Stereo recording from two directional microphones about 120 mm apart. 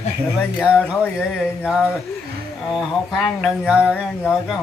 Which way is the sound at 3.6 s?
10° right (ahead or behind).